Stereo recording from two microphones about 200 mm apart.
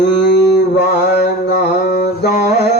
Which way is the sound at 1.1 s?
55° left (ahead or behind).